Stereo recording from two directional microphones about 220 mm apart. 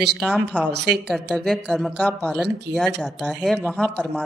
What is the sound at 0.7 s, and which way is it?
Speech, 50° right (ahead or behind).